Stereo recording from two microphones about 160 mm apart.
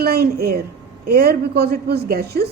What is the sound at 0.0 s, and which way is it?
A woman's voice, 75° right (ahead or behind).